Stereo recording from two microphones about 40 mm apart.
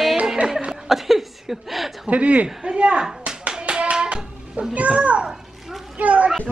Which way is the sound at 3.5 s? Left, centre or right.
Right.